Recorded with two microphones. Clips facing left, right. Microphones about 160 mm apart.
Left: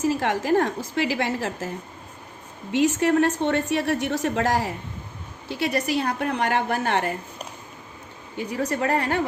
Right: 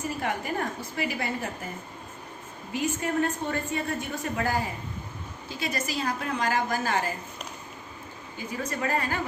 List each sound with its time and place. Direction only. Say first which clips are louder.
0.0 s a woman's voice: left 7 dB; 90° left
2.7 s a woman's voice: left 8 dB; 80° left
5.5 s a woman's voice: left 8 dB; 65° left (ahead or behind)
8.4 s a woman's voice: left 7 dB; 70° left (ahead or behind)